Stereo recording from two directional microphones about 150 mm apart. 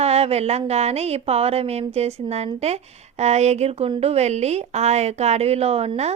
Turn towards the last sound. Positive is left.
turn(degrees=-45)  # may be behind; listen again after turning